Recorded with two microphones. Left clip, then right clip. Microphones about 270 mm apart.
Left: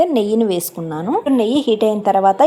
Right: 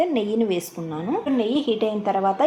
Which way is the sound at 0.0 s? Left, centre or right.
Left.